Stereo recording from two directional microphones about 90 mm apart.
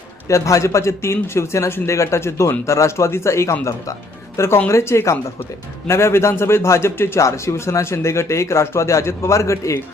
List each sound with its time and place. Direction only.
0.3 s a man's voice: 35° left (ahead or behind)